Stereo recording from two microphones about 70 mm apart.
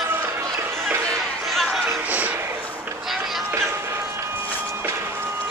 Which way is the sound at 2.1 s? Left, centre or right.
Right.